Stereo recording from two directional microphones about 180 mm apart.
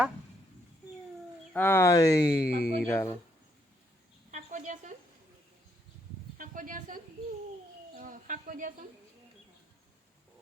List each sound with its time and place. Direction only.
1.5 s speech: 10° left (ahead or behind)
2.4 s speech: 60° left (ahead or behind)
2.7 s speech: 10° left (ahead or behind)
4.3 s insect: 45° right (ahead or behind)
6.3 s a sound: 50° right (ahead or behind)